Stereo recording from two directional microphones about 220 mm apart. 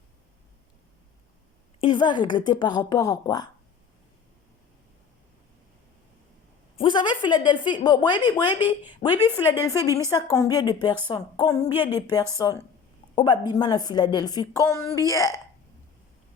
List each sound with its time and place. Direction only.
1.8 s speech: 20° left (ahead or behind)
6.7 s a woman's voice: 20° left (ahead or behind)
11.7 s speech: 10° right (ahead or behind)
11.9 s a woman's voice: 20° left (ahead or behind)